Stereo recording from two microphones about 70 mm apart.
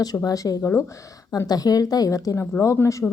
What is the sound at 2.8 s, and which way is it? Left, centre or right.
Speech, left.